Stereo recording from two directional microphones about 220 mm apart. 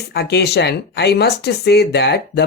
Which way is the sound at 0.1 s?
50° left (ahead or behind).